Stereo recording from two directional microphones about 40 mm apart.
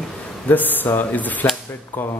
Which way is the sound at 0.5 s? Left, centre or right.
Left.